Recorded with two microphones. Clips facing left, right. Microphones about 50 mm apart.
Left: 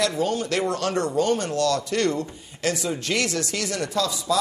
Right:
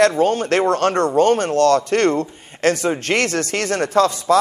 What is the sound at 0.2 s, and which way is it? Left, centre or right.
Speech, right.